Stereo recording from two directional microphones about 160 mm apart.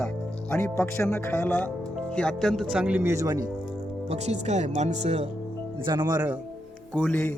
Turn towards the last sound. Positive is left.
turn(degrees=10)  # may be behind; listen again after turning